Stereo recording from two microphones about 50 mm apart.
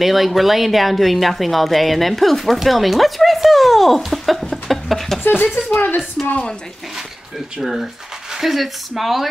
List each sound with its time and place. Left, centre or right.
0.0 s a woman's voice: centre
5.2 s a woman's voice: left
7.6 s speech: centre